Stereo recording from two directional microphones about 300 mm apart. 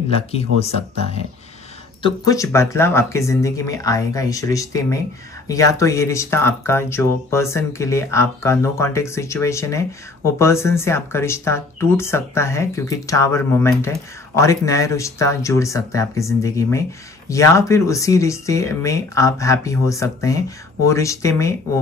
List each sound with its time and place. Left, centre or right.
0.1 s speech: centre
2.0 s speech: centre